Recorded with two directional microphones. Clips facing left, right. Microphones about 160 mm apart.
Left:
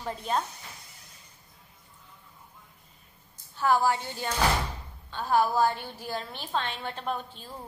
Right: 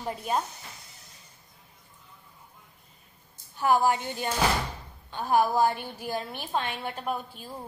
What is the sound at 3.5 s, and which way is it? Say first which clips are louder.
A woman's voice: right 1 dB; 15° right (ahead or behind).